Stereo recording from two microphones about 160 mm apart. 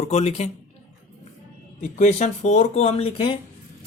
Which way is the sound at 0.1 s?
45° left (ahead or behind).